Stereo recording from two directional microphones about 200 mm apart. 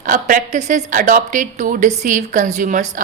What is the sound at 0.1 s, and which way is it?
A woman's voice, 40° right (ahead or behind).